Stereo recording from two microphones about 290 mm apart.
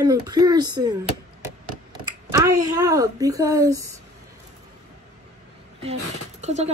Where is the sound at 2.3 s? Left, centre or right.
Centre.